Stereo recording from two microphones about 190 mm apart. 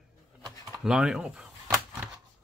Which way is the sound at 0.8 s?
5° right (ahead or behind).